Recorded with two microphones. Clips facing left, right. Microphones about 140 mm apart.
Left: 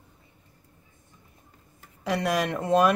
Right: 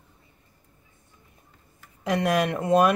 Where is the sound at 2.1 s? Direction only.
10° right (ahead or behind).